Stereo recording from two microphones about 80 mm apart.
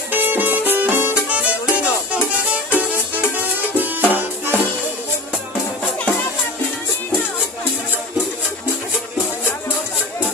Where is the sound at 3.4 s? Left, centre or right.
Right.